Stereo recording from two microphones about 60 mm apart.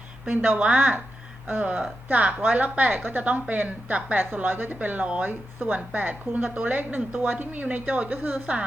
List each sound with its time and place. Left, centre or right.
0.3 s a woman's voice: right